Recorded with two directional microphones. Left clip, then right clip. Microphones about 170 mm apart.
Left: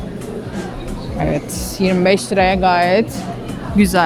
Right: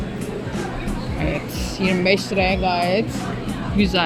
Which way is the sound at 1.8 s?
30° left (ahead or behind).